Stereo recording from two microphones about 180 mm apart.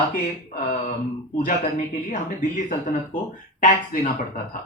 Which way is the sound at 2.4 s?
50° left (ahead or behind).